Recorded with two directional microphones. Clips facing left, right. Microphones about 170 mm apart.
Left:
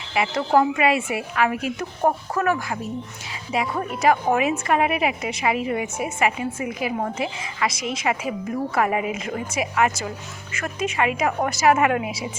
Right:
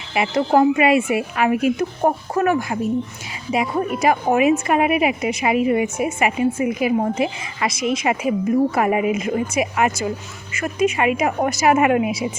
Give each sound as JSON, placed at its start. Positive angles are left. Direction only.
{"t": 0.1, "sound": "speech", "side_deg": -20}